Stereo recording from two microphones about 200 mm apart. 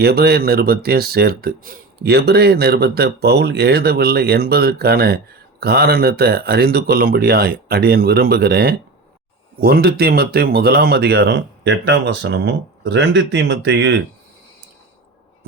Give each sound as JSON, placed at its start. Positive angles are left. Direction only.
{"t": 0.0, "sound": "speech", "side_deg": -50}